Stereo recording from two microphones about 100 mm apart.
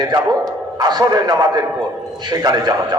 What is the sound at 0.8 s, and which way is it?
A man's voice, 45° right (ahead or behind).